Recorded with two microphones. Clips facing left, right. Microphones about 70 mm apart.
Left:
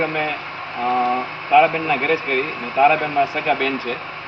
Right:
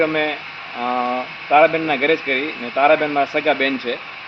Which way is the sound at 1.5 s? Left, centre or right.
Right.